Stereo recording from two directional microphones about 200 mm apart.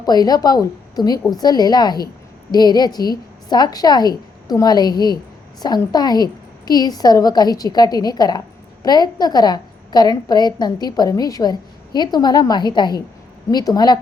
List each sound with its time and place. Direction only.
0.0 s a woman's voice: 20° left (ahead or behind)